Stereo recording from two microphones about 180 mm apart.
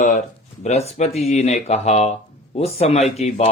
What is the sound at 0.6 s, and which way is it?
Speech, 35° left (ahead or behind).